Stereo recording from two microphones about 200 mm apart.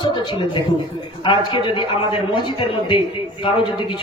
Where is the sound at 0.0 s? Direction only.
25° left (ahead or behind).